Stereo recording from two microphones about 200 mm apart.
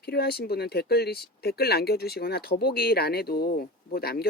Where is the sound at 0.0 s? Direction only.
55° left (ahead or behind).